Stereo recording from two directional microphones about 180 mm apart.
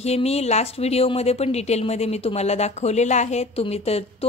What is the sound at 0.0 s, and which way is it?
Speech, 35° left (ahead or behind).